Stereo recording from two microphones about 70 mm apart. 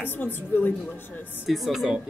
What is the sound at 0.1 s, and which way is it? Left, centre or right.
A woman's voice, left.